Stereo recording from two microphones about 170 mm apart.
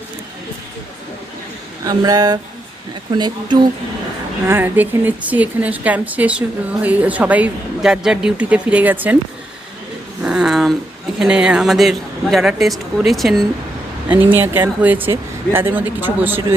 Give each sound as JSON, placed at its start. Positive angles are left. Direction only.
{"t": 1.8, "sound": "speech", "side_deg": -20}
{"t": 4.4, "sound": "a woman's voice", "side_deg": -15}
{"t": 10.2, "sound": "a sound", "side_deg": -5}
{"t": 11.2, "sound": "speech", "side_deg": -5}
{"t": 14.1, "sound": "a woman's voice", "side_deg": -10}